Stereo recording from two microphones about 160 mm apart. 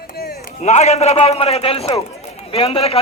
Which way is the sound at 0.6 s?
45° left (ahead or behind).